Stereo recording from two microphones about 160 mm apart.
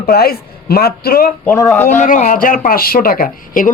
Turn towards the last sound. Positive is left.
turn(degrees=60)  # may be behind; listen again after turning